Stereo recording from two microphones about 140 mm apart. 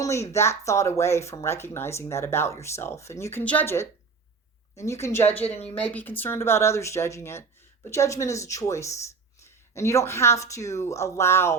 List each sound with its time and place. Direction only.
0.0 s speech: 20° left (ahead or behind)
5.4 s a woman's voice: 45° left (ahead or behind)
5.7 s speech: 10° left (ahead or behind)